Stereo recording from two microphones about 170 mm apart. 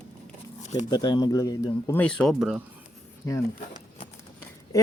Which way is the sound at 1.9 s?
5° left (ahead or behind).